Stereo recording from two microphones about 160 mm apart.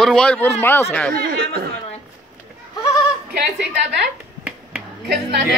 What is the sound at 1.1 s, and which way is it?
Speech, 75° right (ahead or behind).